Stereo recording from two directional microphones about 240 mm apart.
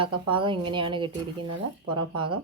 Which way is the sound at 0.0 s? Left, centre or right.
Right.